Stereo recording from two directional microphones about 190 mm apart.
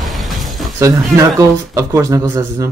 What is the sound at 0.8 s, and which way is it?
Speech, 15° right (ahead or behind).